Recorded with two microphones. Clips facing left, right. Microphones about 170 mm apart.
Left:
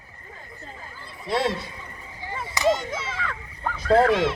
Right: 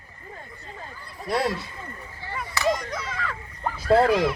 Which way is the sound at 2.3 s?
20° left (ahead or behind).